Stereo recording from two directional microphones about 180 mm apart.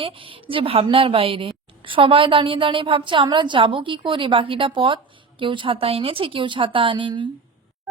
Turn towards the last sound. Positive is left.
turn(degrees=-25)  # may be behind; listen again after turning